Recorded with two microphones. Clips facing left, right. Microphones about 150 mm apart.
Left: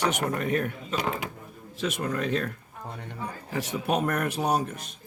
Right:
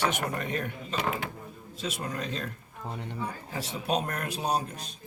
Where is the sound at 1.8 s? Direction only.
60° left (ahead or behind).